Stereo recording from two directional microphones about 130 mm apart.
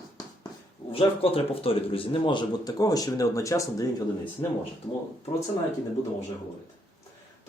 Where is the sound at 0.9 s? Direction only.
45° left (ahead or behind); by 4.0 s 25° left (ahead or behind).